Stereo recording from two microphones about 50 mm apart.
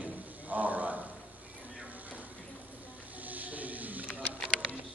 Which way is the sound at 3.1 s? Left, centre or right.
Right.